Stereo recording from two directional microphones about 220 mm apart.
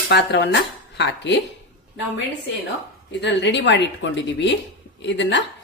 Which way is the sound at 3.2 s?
55° left (ahead or behind).